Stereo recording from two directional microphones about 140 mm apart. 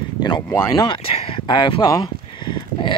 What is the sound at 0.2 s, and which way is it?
Speech, 30° left (ahead or behind).